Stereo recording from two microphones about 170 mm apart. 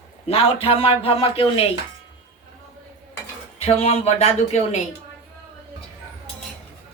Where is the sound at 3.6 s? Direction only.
35° left (ahead or behind).